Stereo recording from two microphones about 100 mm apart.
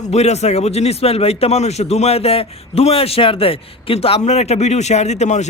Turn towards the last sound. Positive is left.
turn(degrees=90)